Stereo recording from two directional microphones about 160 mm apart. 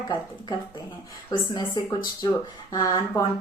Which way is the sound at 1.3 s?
25° left (ahead or behind).